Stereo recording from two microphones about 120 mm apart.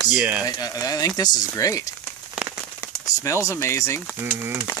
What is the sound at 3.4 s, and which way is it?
Speech, 25° left (ahead or behind).